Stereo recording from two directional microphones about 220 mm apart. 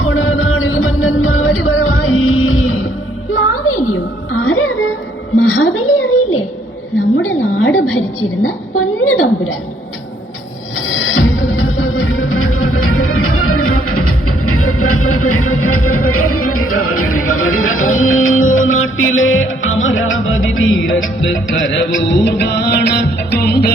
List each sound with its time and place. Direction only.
0.0 s music: 65° left (ahead or behind)
5.4 s a sound: 75° left (ahead or behind)
7.2 s a woman's voice: 70° left (ahead or behind)
10.8 s music: 65° left (ahead or behind); by 23.7 s 45° left (ahead or behind)